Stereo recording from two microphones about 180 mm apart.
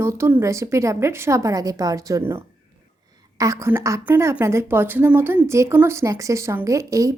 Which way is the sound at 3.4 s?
15° right (ahead or behind).